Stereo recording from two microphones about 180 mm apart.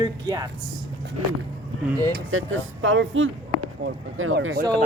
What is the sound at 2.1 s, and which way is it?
Speech, 90° right.